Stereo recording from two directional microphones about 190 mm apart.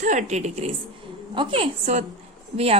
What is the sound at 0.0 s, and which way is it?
A woman's voice, 40° right (ahead or behind).